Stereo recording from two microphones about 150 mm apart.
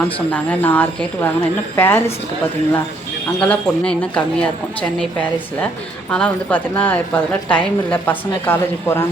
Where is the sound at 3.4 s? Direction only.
5° left (ahead or behind).